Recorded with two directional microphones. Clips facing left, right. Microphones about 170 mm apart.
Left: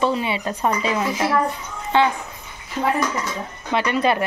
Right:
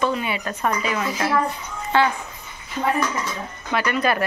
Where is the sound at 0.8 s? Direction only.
15° left (ahead or behind).